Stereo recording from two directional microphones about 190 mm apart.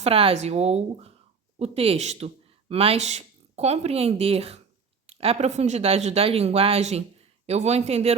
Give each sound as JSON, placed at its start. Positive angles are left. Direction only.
{"t": 0.0, "sound": "speech", "side_deg": -30}